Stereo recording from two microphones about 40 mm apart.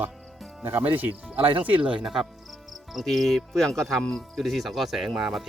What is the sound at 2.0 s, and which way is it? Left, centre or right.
Cricket, centre.